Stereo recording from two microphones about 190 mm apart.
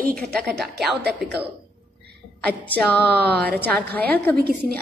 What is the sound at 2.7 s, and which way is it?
A woman's voice, 5° left (ahead or behind).